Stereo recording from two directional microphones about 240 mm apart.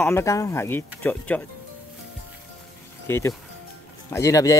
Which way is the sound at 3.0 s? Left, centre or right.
Centre.